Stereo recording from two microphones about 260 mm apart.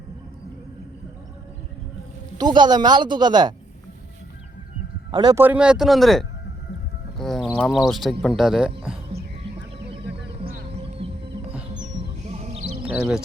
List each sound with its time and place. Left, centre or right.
2.4 s speech: centre
5.1 s a man's voice: centre
11.0 s music: right
12.9 s a man's voice: centre